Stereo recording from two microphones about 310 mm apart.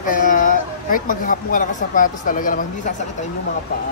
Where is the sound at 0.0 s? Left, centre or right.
Left.